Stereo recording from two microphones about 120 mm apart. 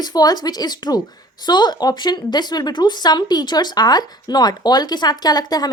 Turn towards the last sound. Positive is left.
turn(degrees=35)  # may be behind; listen again after turning